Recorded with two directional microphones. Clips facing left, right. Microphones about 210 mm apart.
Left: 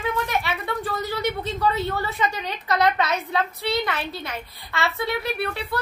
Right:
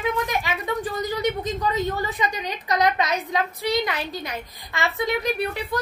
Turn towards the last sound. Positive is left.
turn(degrees=-15)  # may be behind; listen again after turning